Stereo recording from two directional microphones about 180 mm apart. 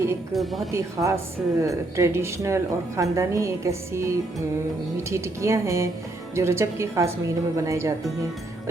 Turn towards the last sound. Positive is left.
turn(degrees=-15)  # may be behind; listen again after turning